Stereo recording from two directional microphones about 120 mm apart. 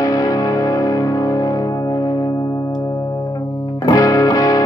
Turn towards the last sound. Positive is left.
turn(degrees=30)  # may be behind; listen again after turning